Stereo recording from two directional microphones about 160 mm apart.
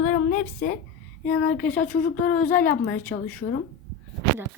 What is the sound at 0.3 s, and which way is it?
Speech, 55° left (ahead or behind).